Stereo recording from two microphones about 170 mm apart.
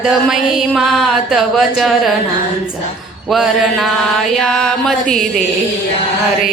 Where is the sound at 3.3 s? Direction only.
Centre (ahead or behind).